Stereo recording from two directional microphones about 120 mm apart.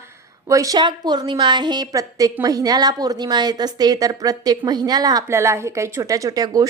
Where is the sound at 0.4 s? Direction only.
25° right (ahead or behind).